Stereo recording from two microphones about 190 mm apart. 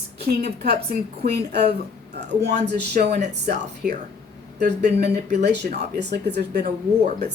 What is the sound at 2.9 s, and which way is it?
Speech, 45° right (ahead or behind).